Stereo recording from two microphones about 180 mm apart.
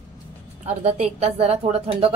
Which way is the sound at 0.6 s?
35° right (ahead or behind).